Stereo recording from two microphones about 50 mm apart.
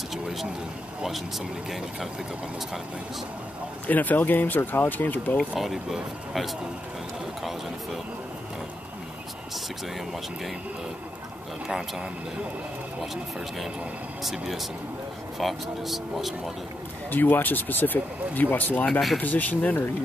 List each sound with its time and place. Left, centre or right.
0.1 s a sound: centre
3.8 s speech: left
5.6 s speech: centre
11.6 s speech: centre
17.1 s speech: left